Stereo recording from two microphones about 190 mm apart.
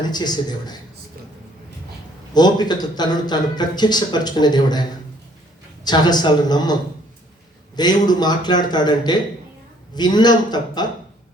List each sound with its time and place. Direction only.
0.0 s speech: 20° left (ahead or behind)
2.3 s speech: 20° left (ahead or behind)
7.8 s speech: 20° left (ahead or behind)